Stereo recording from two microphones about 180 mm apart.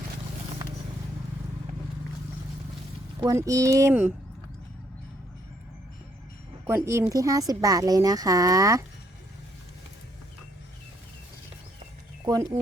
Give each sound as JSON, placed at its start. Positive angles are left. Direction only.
{"t": 3.2, "sound": "speech", "side_deg": -20}
{"t": 6.7, "sound": "speech", "side_deg": -15}
{"t": 12.2, "sound": "speech", "side_deg": -20}